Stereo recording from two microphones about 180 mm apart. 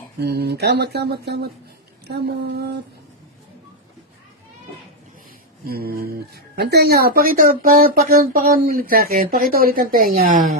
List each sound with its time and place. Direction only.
0.2 s speech: 65° right (ahead or behind)
5.6 s speech: 60° right (ahead or behind)